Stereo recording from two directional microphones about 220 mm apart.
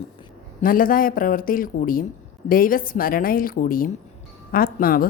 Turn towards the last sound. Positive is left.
turn(degrees=40)  # may be behind; listen again after turning